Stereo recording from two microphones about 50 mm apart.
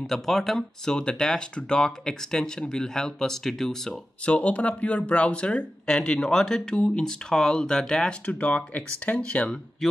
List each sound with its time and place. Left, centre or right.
0.0 s speech: centre
4.3 s speech: left
8.3 s speech: left